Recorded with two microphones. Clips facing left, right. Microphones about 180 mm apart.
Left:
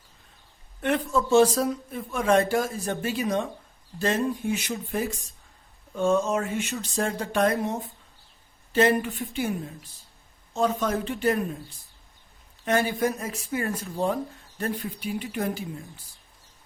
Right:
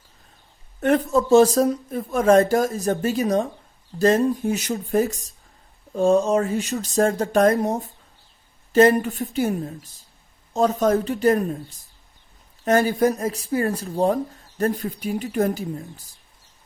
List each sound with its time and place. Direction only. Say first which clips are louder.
0.8 s speech: right 6 dB; 40° right (ahead or behind)
12.6 s speech: right 6 dB; 40° right (ahead or behind)